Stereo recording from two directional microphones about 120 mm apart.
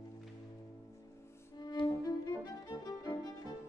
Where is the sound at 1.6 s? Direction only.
35° left (ahead or behind).